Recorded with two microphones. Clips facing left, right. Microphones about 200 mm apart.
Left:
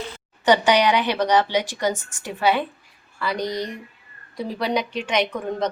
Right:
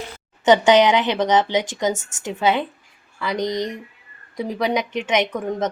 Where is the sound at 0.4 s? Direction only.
20° right (ahead or behind).